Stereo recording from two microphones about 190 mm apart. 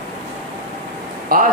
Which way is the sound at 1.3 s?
50° right (ahead or behind).